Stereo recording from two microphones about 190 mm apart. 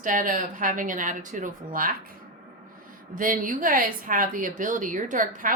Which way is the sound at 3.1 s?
45° right (ahead or behind).